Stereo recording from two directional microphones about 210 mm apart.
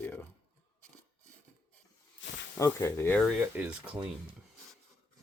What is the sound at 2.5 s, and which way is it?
Speech, 15° left (ahead or behind).